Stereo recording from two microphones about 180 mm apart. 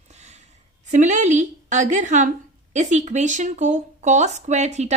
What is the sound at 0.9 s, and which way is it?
Speech, 40° right (ahead or behind).